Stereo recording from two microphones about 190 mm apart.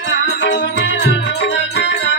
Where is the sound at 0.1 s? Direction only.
70° left (ahead or behind).